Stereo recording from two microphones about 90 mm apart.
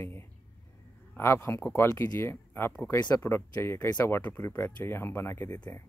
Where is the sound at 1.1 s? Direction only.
25° left (ahead or behind).